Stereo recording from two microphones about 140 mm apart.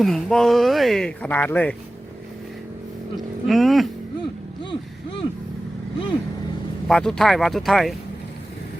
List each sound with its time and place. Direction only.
0.0 s speech: centre (ahead or behind)
3.4 s speech: centre (ahead or behind)
4.6 s speech: 35° left (ahead or behind)
6.8 s speech: 5° left (ahead or behind)